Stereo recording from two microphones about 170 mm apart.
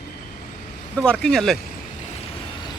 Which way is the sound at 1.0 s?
5° left (ahead or behind).